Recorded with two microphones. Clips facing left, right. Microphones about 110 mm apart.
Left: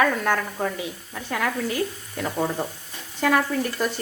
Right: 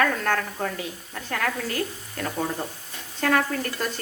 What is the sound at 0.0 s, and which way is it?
A woman's voice, 10° left (ahead or behind).